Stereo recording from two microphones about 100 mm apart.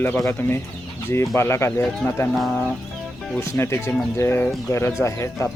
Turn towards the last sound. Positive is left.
turn(degrees=30)  # may be behind; listen again after turning